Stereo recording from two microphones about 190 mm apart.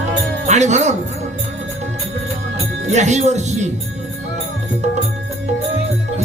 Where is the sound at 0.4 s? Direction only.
40° right (ahead or behind).